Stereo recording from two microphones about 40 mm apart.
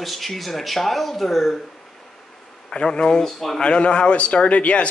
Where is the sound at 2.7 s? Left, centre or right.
Left.